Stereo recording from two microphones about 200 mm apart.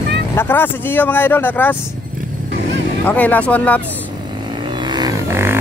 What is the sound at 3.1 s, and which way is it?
Speech, 10° left (ahead or behind).